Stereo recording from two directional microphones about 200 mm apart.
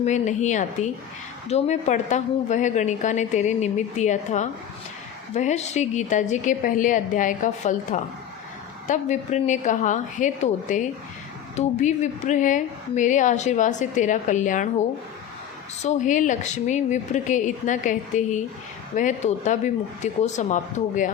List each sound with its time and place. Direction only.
0.0 s a woman's voice: 35° left (ahead or behind)